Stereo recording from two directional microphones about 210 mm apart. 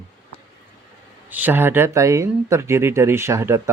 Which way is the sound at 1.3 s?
10° right (ahead or behind).